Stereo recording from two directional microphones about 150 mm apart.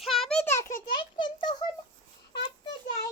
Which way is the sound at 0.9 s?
30° left (ahead or behind).